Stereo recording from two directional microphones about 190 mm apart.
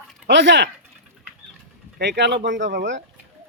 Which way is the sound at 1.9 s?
65° right (ahead or behind).